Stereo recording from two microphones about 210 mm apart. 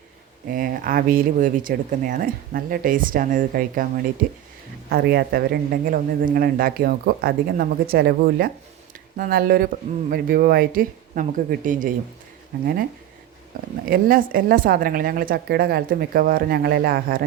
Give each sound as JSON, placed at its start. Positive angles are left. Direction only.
{"t": 0.5, "sound": "speech", "side_deg": -40}
{"t": 13.9, "sound": "speech", "side_deg": -45}